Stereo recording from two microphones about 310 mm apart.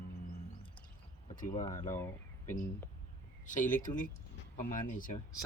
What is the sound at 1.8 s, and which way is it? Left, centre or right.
Speech, centre.